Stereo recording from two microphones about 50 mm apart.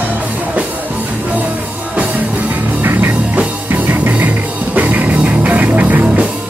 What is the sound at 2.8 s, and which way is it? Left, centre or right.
Music, right.